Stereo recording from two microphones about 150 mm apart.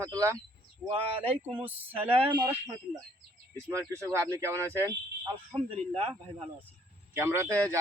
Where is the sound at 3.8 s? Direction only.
20° right (ahead or behind).